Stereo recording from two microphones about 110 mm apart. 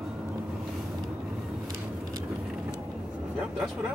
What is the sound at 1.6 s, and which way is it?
Vehicle, 30° right (ahead or behind).